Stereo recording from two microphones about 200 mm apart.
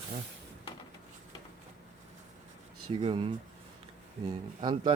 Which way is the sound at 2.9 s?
25° right (ahead or behind).